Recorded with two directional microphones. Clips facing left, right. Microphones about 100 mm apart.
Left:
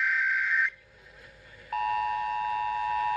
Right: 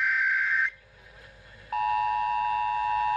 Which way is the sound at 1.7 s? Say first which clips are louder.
Right 2 dB; 40° right (ahead or behind).